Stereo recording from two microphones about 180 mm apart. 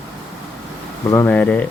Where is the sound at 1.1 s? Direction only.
10° left (ahead or behind).